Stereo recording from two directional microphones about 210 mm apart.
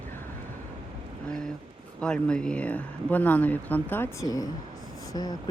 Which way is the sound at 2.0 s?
5° left (ahead or behind).